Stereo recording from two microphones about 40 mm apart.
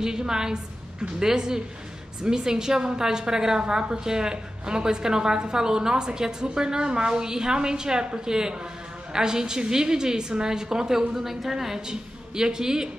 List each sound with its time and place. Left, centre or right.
0.0 s a woman's voice: centre